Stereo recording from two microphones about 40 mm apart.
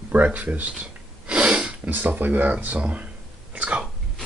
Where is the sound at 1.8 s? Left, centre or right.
Right.